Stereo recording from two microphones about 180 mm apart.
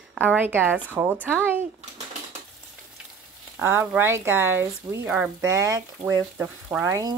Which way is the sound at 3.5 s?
10° right (ahead or behind).